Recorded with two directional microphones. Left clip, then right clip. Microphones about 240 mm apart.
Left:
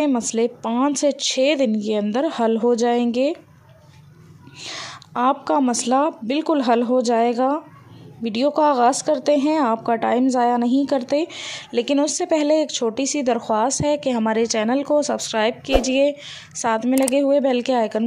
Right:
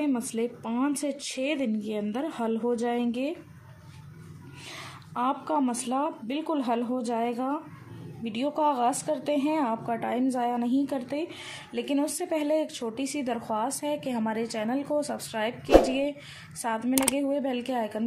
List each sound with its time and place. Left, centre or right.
0.0 s a woman's voice: left
4.6 s a woman's voice: left